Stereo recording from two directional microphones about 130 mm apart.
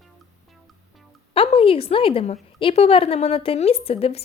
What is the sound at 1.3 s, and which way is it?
A woman's voice, 45° left (ahead or behind).